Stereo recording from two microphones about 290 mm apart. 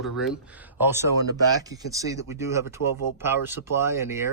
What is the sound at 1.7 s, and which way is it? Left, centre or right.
Speech, centre.